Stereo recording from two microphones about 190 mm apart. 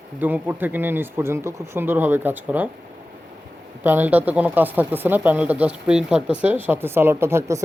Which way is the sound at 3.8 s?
10° right (ahead or behind).